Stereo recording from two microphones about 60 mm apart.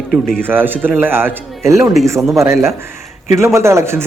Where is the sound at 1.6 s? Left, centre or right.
Right.